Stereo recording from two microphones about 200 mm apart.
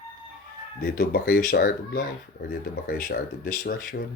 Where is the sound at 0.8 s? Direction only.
50° left (ahead or behind).